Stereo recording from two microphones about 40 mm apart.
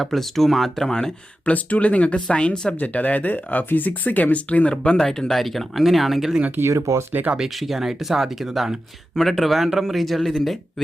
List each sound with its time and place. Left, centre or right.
0.0 s speech: centre
1.5 s speech: left
2.8 s speech: left
4.9 s speech: centre
5.4 s speech: centre
6.6 s speech: right
7.2 s speech: right
7.5 s speech: centre
9.1 s speech: centre